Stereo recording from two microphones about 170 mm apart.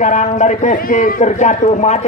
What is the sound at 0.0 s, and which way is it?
A man's voice, 45° left (ahead or behind).